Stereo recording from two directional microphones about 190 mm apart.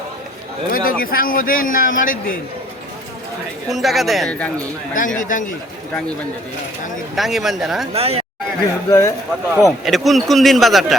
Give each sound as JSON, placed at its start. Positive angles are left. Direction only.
{"t": 0.7, "sound": "a man's voice", "side_deg": 50}
{"t": 3.7, "sound": "a man's voice", "side_deg": 0}
{"t": 4.9, "sound": "a man's voice", "side_deg": 45}
{"t": 7.2, "sound": "a man's voice", "side_deg": 0}
{"t": 7.9, "sound": "speech", "side_deg": -30}
{"t": 8.9, "sound": "speech", "side_deg": 15}
{"t": 9.6, "sound": "a man's voice", "side_deg": 0}